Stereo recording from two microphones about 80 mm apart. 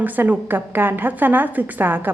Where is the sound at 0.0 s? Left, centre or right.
Right.